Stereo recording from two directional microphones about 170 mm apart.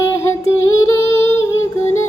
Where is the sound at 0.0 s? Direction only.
15° left (ahead or behind).